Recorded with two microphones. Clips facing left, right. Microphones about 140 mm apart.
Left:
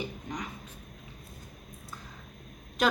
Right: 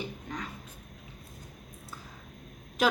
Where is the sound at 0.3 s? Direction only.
15° left (ahead or behind).